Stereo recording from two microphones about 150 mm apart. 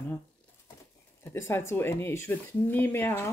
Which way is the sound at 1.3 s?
15° left (ahead or behind).